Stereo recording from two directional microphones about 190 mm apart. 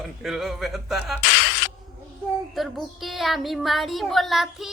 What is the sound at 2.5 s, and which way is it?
A woman's voice, centre (ahead or behind).